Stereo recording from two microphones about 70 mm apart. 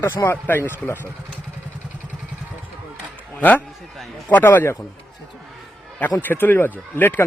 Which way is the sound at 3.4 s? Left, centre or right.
Left.